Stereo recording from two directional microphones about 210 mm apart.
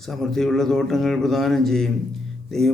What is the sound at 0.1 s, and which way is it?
Speech, centre (ahead or behind).